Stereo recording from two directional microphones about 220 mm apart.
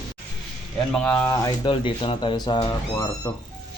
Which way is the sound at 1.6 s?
20° left (ahead or behind).